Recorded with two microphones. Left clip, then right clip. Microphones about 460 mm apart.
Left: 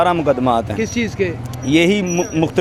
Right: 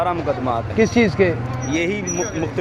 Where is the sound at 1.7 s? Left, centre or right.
Left.